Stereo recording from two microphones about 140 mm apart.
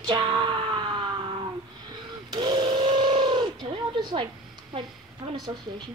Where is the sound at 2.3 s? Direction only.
35° right (ahead or behind).